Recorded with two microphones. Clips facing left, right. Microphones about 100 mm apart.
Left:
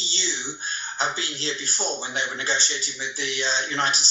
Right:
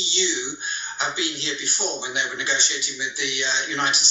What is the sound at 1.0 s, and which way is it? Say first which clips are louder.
Speech: even; 40° left (ahead or behind).